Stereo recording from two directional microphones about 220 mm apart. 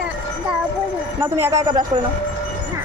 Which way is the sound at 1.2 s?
10° right (ahead or behind).